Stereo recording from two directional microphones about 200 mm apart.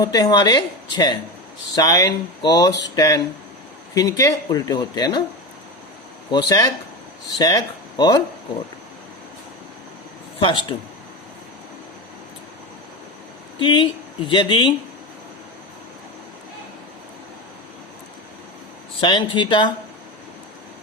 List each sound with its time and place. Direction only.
0.0 s speech: 20° left (ahead or behind)
6.3 s speech: 20° left (ahead or behind)
10.3 s speech: 25° left (ahead or behind)
13.6 s speech: 25° left (ahead or behind)
18.9 s speech: 25° left (ahead or behind)